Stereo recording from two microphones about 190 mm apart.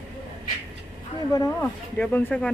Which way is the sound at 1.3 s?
15° left (ahead or behind).